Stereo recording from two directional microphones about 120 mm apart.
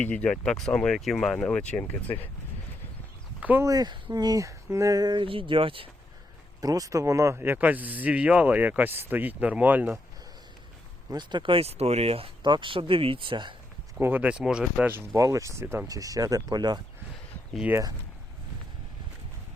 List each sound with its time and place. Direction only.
0.0 s speech: 10° left (ahead or behind)
3.6 s speech: 30° right (ahead or behind); by 5.9 s 50° right (ahead or behind)
6.6 s speech: 30° right (ahead or behind); by 9.9 s 15° right (ahead or behind)
11.1 s speech: 40° right (ahead or behind)
14.0 s speech: 15° right (ahead or behind)
14.9 s speech: 25° right (ahead or behind)